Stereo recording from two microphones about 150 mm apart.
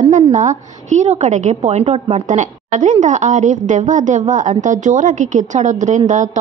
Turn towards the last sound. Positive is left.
turn(degrees=-55)  # may be behind; listen again after turning